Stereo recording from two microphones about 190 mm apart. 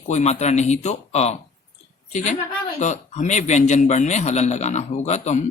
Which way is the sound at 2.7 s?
40° left (ahead or behind).